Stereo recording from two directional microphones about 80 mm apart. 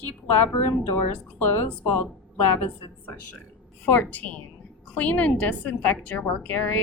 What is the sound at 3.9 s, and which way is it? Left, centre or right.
A woman's voice, left.